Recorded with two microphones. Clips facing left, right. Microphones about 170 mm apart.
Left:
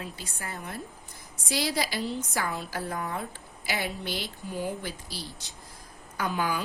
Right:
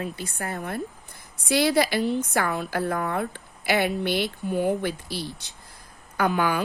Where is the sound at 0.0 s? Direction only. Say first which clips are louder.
Right 7 dB; 60° right (ahead or behind).